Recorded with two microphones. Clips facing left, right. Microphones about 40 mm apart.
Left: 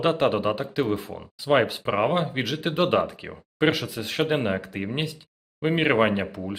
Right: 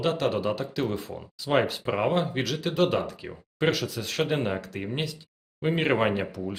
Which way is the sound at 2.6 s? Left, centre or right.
Left.